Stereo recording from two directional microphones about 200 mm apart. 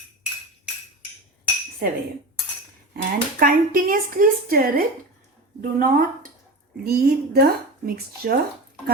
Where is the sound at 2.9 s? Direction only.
45° right (ahead or behind).